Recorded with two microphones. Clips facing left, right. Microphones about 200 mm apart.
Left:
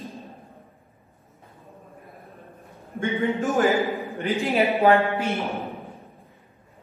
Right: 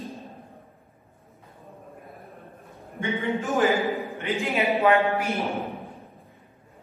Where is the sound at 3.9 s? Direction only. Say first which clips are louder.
Even; centre (ahead or behind).